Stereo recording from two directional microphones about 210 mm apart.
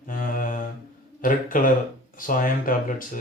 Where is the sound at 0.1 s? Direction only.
40° left (ahead or behind).